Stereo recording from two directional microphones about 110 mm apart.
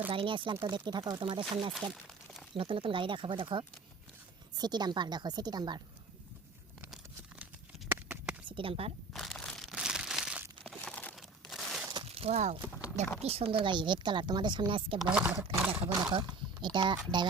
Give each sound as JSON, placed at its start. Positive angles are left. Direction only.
{"t": 0.1, "sound": "speech", "side_deg": -50}
{"t": 1.2, "sound": "speech", "side_deg": -50}
{"t": 1.7, "sound": "speech", "side_deg": 0}
{"t": 2.6, "sound": "a woman's voice", "side_deg": -55}
{"t": 8.0, "sound": "a sound", "side_deg": -15}
{"t": 8.4, "sound": "speech", "side_deg": -55}
{"t": 9.1, "sound": "crumpling", "side_deg": 5}
{"t": 10.6, "sound": "a sound", "side_deg": 5}
{"t": 12.1, "sound": "speech", "side_deg": -65}
{"t": 13.2, "sound": "speech", "side_deg": -65}
{"t": 15.0, "sound": "speech", "side_deg": -10}
{"t": 15.9, "sound": "a woman's voice", "side_deg": -35}